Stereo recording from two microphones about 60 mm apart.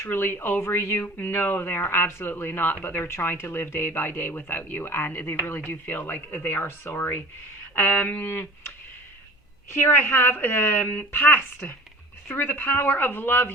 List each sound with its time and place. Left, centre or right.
0.0 s speech: left
1.0 s speech: left
9.9 s speech: left